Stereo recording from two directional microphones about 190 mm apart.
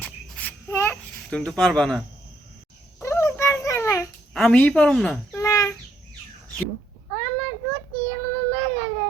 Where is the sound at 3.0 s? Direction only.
15° left (ahead or behind).